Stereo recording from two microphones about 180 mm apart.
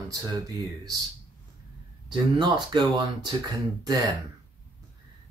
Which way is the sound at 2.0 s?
25° right (ahead or behind).